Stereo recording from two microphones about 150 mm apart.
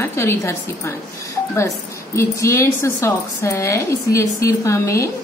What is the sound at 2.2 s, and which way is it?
A woman's voice, 20° left (ahead or behind).